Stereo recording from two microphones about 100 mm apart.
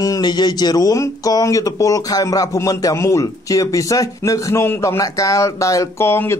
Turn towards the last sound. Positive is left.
turn(degrees=25)  # may be behind; listen again after turning